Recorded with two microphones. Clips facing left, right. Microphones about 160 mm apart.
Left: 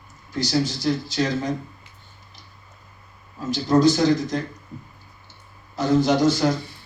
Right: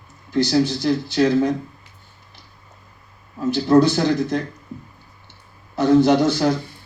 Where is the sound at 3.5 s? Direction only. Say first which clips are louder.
Right 2 dB; 60° right (ahead or behind).